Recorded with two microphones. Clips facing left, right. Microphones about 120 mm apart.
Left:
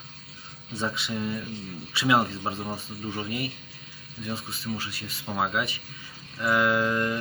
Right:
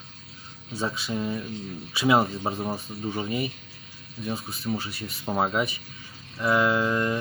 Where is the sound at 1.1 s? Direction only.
15° right (ahead or behind).